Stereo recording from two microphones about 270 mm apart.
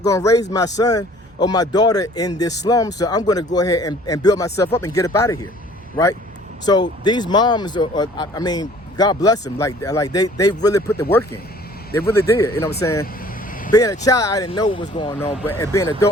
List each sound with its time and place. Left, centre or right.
0.0 s speech: centre
6.7 s speech: centre